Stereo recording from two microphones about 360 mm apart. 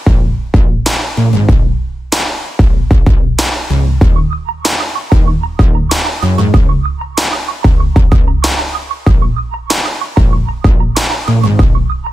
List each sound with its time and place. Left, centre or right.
0.0 s music: centre